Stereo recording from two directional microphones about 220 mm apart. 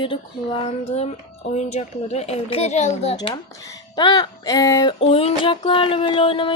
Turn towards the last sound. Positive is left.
turn(degrees=25)  # may be behind; listen again after turning